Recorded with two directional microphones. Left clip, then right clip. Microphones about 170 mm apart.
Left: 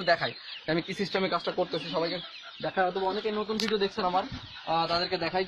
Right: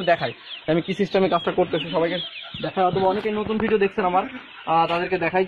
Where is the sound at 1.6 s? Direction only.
10° right (ahead or behind).